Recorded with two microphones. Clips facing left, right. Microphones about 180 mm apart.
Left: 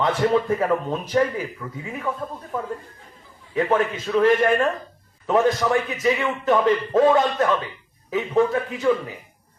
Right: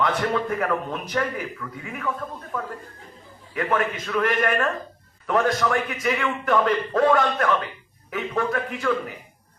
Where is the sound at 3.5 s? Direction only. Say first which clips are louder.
Left 3 dB; 25° left (ahead or behind).